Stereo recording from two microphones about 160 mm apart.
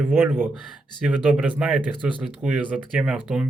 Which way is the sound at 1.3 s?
5° right (ahead or behind).